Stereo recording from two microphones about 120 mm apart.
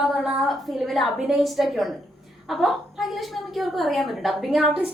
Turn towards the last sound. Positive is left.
turn(degrees=-5)  # may be behind; listen again after turning